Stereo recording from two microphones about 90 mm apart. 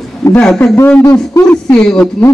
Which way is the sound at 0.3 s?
10° left (ahead or behind).